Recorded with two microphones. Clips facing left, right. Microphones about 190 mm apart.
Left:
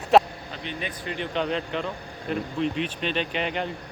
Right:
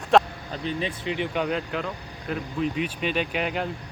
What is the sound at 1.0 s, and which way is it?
Speech, 15° right (ahead or behind).